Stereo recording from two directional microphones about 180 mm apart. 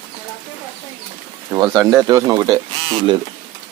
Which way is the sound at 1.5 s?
20° right (ahead or behind).